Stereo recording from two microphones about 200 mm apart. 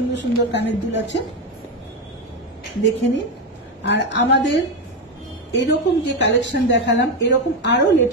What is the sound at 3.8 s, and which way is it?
Speech, 60° left (ahead or behind).